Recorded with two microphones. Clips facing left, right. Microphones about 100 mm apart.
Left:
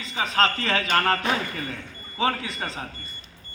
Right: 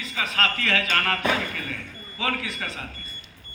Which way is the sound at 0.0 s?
30° left (ahead or behind).